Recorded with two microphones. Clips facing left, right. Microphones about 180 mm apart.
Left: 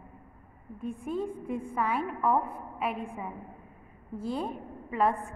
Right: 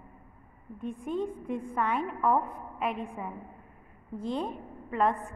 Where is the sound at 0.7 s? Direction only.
5° left (ahead or behind).